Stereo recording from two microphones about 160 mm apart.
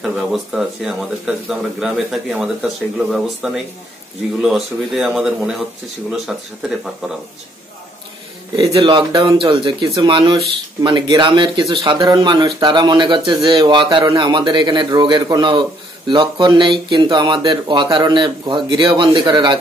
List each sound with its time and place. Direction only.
0.0 s speech: centre (ahead or behind)
8.7 s speech: 30° right (ahead or behind)